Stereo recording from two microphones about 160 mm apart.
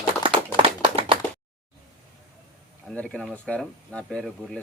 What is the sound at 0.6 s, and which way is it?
Clapping, 35° right (ahead or behind).